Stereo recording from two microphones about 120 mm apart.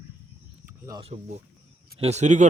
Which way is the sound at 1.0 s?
65° right (ahead or behind).